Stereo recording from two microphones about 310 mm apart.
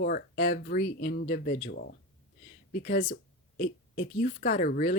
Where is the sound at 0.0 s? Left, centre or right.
Left.